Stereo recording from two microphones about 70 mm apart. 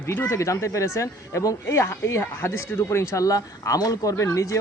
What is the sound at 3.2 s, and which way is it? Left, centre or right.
Speech, left.